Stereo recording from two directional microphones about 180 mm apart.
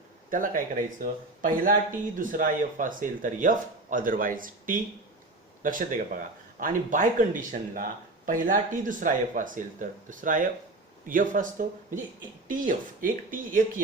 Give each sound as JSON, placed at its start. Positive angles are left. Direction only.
{"t": 0.3, "sound": "speech", "side_deg": -50}